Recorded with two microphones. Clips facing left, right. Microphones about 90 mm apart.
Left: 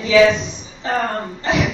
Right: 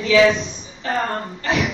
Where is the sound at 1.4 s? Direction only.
20° left (ahead or behind).